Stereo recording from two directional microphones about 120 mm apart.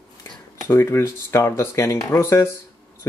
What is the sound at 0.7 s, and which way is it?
Speech, 20° left (ahead or behind).